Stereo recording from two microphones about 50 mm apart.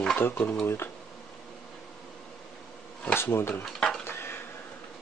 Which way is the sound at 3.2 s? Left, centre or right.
Left.